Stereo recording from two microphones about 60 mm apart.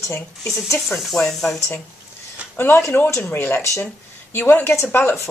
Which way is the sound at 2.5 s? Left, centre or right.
Left.